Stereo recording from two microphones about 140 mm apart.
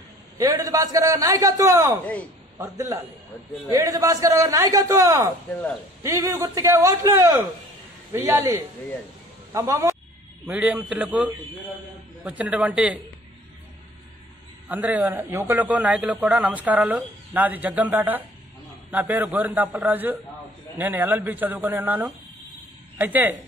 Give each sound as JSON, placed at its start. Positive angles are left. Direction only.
{"t": 0.4, "sound": "a man's voice", "side_deg": -25}
{"t": 12.3, "sound": "a man's voice", "side_deg": -10}
{"t": 14.7, "sound": "a man's voice", "side_deg": -10}